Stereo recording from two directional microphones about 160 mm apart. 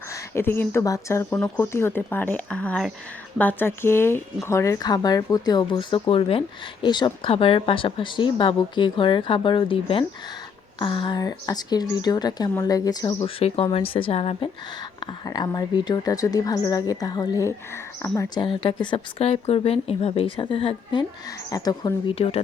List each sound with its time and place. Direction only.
0.1 s speech: 15° left (ahead or behind)
6.1 s speech: 35° left (ahead or behind)
13.4 s speech: 35° left (ahead or behind)
15.0 s speech: 25° left (ahead or behind)
22.1 s speech: 35° left (ahead or behind)